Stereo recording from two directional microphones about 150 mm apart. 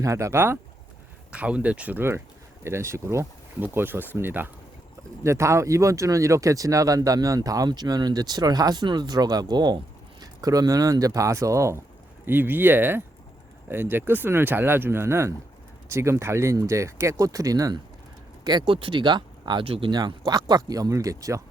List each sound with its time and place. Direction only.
0.0 s speech: 20° right (ahead or behind)